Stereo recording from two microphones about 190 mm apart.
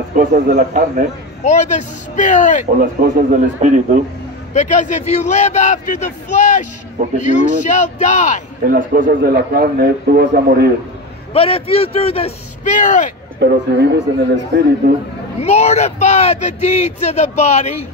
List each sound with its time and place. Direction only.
0.1 s a man's voice: 45° right (ahead or behind)
1.4 s speech: 40° left (ahead or behind)
3.0 s a man's voice: 45° right (ahead or behind)
4.6 s speech: 40° left (ahead or behind)
8.6 s a man's voice: 45° right (ahead or behind)
11.3 s speech: 30° left (ahead or behind)
13.4 s speech: 65° right (ahead or behind)
15.4 s speech: 35° left (ahead or behind)